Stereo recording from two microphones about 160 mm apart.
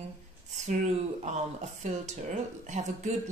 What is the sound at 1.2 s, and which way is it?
Speech, 45° right (ahead or behind).